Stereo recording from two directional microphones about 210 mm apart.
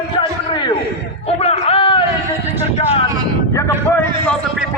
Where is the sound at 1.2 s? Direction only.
30° left (ahead or behind).